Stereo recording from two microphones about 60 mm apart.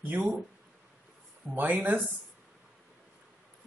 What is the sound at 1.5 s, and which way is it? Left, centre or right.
Speech, right.